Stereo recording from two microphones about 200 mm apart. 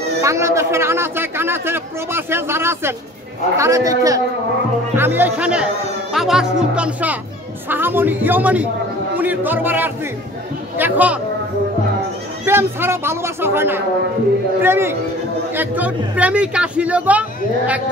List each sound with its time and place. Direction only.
0.2 s a man's voice: 15° right (ahead or behind)
12.4 s a man's voice: 10° right (ahead or behind)